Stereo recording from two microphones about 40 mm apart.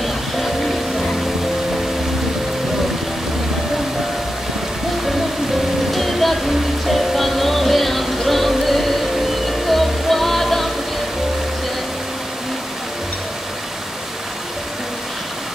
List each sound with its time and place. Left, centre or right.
5.9 s music: centre